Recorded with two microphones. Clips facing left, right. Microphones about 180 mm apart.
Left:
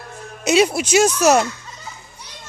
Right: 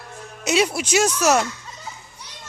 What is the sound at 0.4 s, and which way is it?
Speech, 15° left (ahead or behind).